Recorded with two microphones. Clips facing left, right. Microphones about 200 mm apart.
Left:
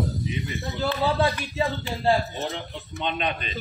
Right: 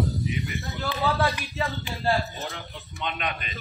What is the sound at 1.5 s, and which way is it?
Speech, 15° left (ahead or behind).